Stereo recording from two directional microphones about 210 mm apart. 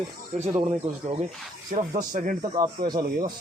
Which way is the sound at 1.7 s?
40° right (ahead or behind).